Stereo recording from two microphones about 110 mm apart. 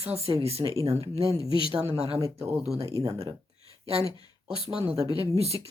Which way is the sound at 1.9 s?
60° right (ahead or behind).